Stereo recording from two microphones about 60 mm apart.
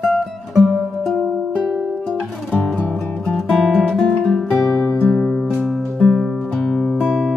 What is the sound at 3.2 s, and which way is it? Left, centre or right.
Music, centre.